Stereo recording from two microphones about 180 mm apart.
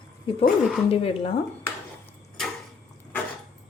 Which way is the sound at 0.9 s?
30° left (ahead or behind).